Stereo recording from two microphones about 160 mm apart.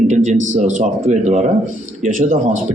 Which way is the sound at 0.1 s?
50° right (ahead or behind).